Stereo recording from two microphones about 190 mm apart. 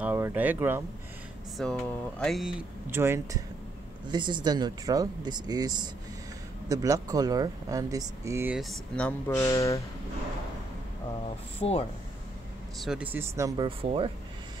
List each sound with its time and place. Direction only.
0.0 s speech: 10° right (ahead or behind)
1.6 s speech: 5° left (ahead or behind)
2.9 s speech: 15° right (ahead or behind)
4.1 s speech: 25° right (ahead or behind)
6.7 s speech: 20° right (ahead or behind)
8.5 s speech: 5° left (ahead or behind)
9.5 s speech: 15° left (ahead or behind)
11.6 s speech: 30° left (ahead or behind)
12.8 s speech: 5° right (ahead or behind)
13.7 s speech: 30° right (ahead or behind)